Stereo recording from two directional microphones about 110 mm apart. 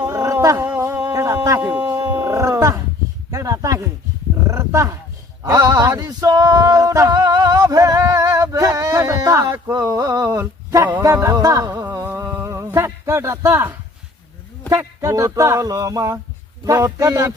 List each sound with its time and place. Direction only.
0.0 s a sound: 30° right (ahead or behind)
1.8 s roaring cats: 35° right (ahead or behind)
3.3 s speech: 30° right (ahead or behind)
5.5 s male singing: 40° right (ahead or behind)
11.0 s music: 30° right (ahead or behind)
14.7 s speech: 25° right (ahead or behind)